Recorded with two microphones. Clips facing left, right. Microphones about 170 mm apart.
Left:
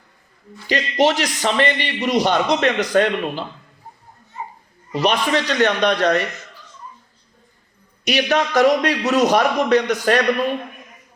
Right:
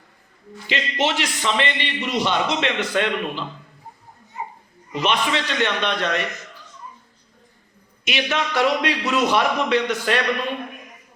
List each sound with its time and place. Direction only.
0.7 s a man's voice: 40° left (ahead or behind)
4.9 s a man's voice: 40° left (ahead or behind)
8.0 s a man's voice: 40° left (ahead or behind)